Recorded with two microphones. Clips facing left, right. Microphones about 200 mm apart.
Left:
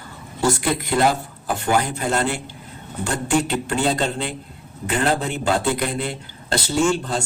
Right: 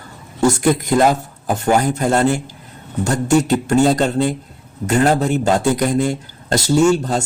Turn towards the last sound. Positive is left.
turn(degrees=-45)  # may be behind; listen again after turning